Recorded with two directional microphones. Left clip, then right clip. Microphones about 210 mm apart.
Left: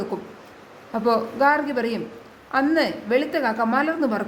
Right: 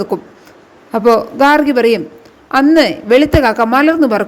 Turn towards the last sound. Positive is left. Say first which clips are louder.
# right 11 dB
turn(degrees=-35)  # may be behind; listen again after turning